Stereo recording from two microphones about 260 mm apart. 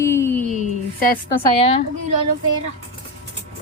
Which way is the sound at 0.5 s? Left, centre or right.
Left.